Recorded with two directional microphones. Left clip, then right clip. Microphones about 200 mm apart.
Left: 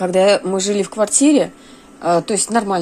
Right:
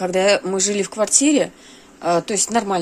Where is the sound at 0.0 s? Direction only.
10° right (ahead or behind).